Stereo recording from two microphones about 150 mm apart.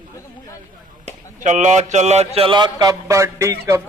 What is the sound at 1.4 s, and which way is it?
Mantra, 55° right (ahead or behind).